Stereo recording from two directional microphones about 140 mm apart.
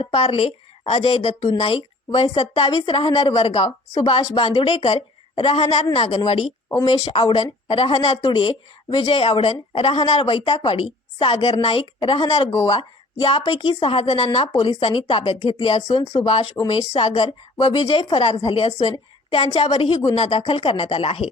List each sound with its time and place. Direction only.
0.0 s a woman's voice: 45° left (ahead or behind)
6.7 s a woman's voice: 30° left (ahead or behind); by 21.2 s 45° left (ahead or behind)